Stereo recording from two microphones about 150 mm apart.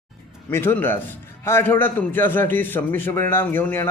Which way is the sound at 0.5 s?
15° left (ahead or behind).